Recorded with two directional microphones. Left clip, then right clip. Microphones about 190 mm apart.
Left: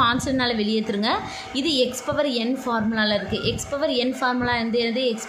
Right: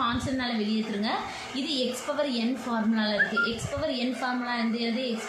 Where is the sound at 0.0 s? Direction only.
55° left (ahead or behind).